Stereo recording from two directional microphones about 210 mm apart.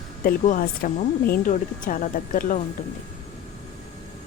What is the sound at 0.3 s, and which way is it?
Speech, 40° left (ahead or behind).